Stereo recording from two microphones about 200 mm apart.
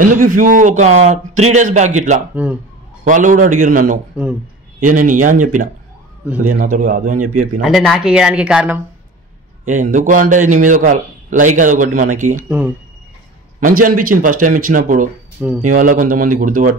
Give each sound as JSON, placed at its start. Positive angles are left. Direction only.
{"t": 0.0, "sound": "a man's voice", "side_deg": -40}
{"t": 2.3, "sound": "a man's voice", "side_deg": -5}
{"t": 3.1, "sound": "a man's voice", "side_deg": -40}
{"t": 7.6, "sound": "speech", "side_deg": 0}
{"t": 9.7, "sound": "a man's voice", "side_deg": -40}
{"t": 12.4, "sound": "a man's voice", "side_deg": -5}
{"t": 13.7, "sound": "a man's voice", "side_deg": -45}